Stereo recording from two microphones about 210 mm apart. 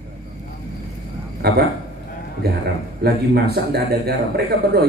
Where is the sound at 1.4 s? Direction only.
50° right (ahead or behind).